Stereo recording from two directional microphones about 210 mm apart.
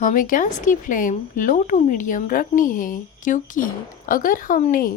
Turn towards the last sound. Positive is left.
turn(degrees=40)  # may be behind; listen again after turning